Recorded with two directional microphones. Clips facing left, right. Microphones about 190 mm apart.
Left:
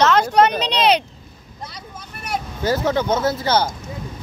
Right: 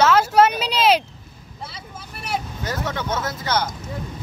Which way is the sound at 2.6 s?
30° left (ahead or behind).